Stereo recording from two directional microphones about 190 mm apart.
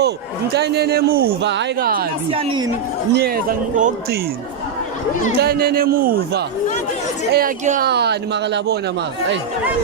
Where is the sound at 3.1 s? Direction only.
50° right (ahead or behind).